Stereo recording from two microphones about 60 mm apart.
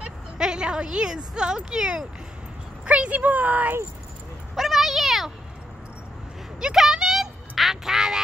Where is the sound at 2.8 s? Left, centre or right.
Centre.